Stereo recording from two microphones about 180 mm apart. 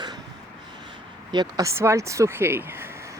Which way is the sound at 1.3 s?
20° right (ahead or behind).